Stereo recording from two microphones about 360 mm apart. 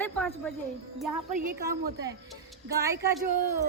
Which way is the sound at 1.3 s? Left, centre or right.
Right.